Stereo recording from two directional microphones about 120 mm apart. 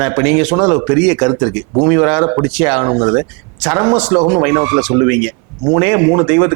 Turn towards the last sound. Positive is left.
turn(degrees=-15)  # may be behind; listen again after turning